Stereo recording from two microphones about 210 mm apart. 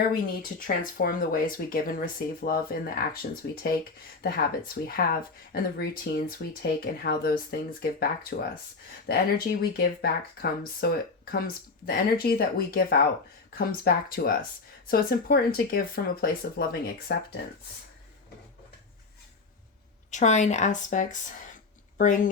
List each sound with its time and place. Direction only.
0.8 s speech: 45° left (ahead or behind)
20.1 s a woman's voice: 35° left (ahead or behind)